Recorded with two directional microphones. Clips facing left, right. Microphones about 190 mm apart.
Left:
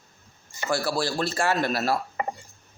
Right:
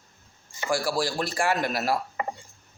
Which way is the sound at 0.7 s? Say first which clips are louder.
Even; 10° right (ahead or behind).